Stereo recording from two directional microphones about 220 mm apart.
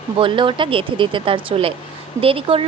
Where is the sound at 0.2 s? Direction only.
20° right (ahead or behind).